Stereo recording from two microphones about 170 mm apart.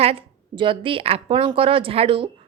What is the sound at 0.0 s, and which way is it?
A woman's voice, 35° right (ahead or behind).